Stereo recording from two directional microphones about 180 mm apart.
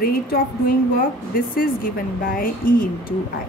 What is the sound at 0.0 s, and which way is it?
A woman's voice, 55° left (ahead or behind).